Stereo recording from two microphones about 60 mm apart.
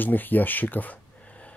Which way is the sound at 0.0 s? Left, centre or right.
Left.